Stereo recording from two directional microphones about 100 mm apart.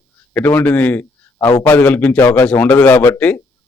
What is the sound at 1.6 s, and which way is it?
A man's voice, 15° left (ahead or behind).